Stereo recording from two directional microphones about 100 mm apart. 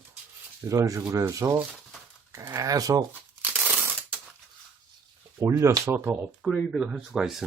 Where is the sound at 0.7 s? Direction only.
35° right (ahead or behind).